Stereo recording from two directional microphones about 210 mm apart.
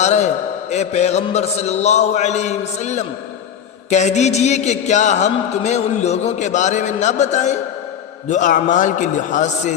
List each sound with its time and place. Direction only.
0.0 s a man's voice: 35° left (ahead or behind)